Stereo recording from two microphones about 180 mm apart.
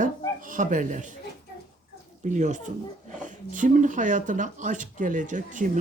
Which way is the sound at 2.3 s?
40° right (ahead or behind).